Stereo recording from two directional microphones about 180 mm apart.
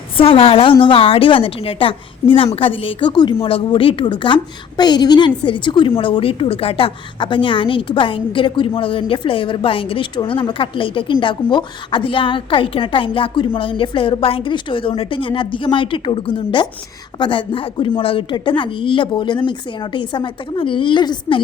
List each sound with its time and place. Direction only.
0.2 s a woman's voice: 30° left (ahead or behind)